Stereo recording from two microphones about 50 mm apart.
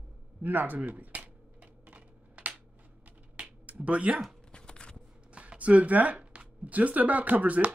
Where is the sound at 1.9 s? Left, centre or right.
Right.